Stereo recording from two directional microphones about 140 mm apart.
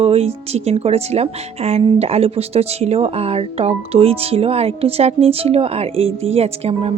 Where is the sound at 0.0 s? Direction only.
45° right (ahead or behind).